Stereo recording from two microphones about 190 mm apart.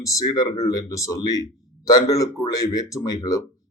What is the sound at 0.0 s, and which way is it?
Speech, 15° left (ahead or behind).